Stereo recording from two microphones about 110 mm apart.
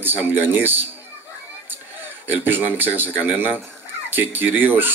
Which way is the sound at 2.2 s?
20° right (ahead or behind).